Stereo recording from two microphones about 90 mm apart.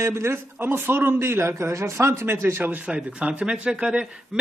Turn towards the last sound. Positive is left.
turn(degrees=-10)  # may be behind; listen again after turning